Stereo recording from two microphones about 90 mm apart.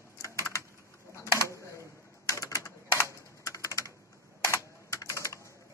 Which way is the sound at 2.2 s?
40° left (ahead or behind).